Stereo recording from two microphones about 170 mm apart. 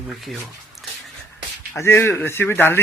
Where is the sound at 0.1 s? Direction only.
Centre (ahead or behind).